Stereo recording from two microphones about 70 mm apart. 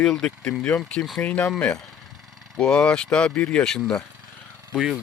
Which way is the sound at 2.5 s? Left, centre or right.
Centre.